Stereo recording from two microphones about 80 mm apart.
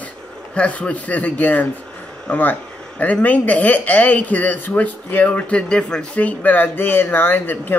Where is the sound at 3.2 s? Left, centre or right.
Centre.